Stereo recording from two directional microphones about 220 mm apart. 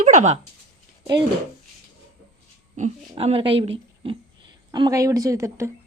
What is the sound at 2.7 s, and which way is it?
A child's voice, 30° right (ahead or behind).